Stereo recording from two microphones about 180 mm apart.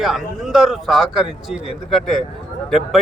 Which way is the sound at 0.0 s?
Centre (ahead or behind).